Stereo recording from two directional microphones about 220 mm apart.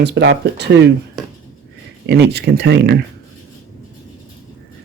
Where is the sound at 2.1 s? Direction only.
50° right (ahead or behind).